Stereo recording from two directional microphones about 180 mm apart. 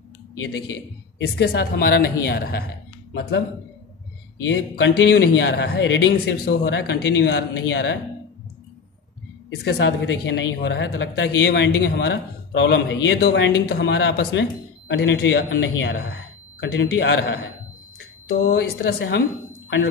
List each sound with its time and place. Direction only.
1.1 s a woman's voice: 70° left (ahead or behind)
3.1 s speech: 80° left
4.5 s speech: 90° left
9.5 s speech: 75° left (ahead or behind)
15.8 s speech: 70° left (ahead or behind)
18.5 s a woman's voice: 65° left (ahead or behind)